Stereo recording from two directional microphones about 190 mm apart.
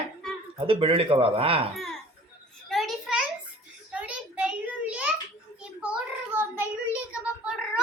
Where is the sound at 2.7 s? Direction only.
Centre (ahead or behind).